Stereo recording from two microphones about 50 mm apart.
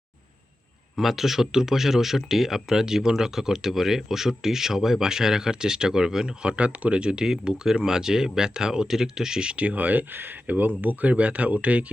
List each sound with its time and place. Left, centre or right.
0.9 s speech: centre; by 11.9 s right